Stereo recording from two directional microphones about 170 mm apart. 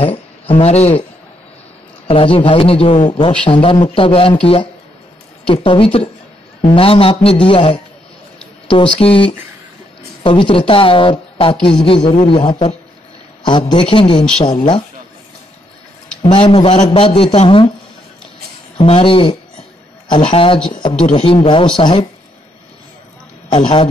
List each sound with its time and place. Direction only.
0.0 s speech: 35° left (ahead or behind)
2.0 s a woman's voice: 30° left (ahead or behind)
16.2 s a woman's voice: 25° left (ahead or behind)
18.8 s a woman's voice: 35° left (ahead or behind)
23.5 s speech: 30° left (ahead or behind)